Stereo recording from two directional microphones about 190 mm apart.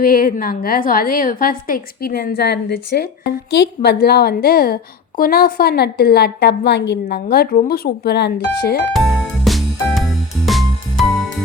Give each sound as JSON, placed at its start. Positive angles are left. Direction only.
{"t": 0.0, "sound": "a woman's voice", "side_deg": 50}
{"t": 8.9, "sound": "music", "side_deg": 0}